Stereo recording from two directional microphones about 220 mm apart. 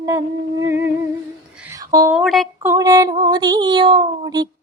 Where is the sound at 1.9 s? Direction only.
15° right (ahead or behind).